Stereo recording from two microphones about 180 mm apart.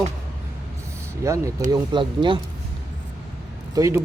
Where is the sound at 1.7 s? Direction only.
25° right (ahead or behind).